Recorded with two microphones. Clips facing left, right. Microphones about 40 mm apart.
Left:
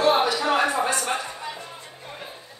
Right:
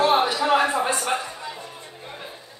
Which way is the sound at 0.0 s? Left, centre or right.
Centre.